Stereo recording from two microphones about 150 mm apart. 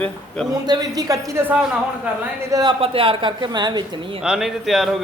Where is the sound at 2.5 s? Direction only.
25° right (ahead or behind).